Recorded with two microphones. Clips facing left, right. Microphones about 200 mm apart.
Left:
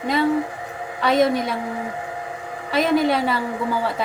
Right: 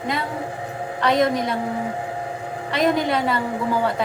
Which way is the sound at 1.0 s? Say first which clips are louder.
Left 1 dB; 5° left (ahead or behind).